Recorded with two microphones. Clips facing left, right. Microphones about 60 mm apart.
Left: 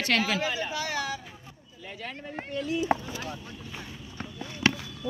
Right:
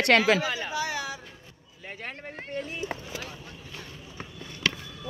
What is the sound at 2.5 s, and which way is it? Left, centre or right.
Speech, right.